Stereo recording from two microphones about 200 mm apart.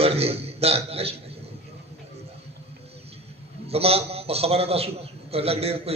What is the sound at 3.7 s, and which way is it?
A man's voice, 30° right (ahead or behind).